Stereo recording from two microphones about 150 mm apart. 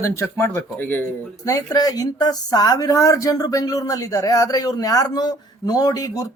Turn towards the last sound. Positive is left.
turn(degrees=25)  # may be behind; listen again after turning